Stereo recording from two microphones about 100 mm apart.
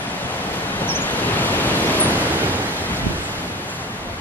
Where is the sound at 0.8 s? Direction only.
20° left (ahead or behind).